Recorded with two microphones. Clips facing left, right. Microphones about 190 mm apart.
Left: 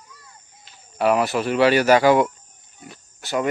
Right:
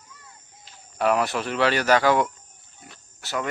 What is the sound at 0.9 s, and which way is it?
Speech, 5° left (ahead or behind).